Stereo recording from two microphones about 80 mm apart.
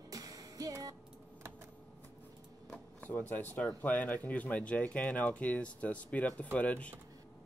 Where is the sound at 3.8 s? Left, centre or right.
Left.